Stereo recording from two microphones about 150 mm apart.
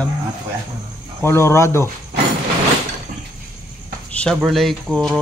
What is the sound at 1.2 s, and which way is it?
Speech, 15° left (ahead or behind).